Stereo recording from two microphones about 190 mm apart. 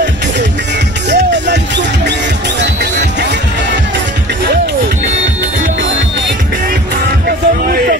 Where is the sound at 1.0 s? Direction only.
65° right (ahead or behind).